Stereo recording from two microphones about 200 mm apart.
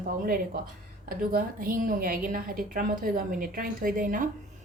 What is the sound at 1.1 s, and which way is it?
A woman's voice, 45° right (ahead or behind).